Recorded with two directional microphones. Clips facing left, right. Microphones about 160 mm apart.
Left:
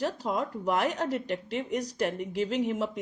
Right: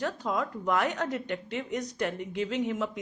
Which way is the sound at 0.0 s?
35° left (ahead or behind).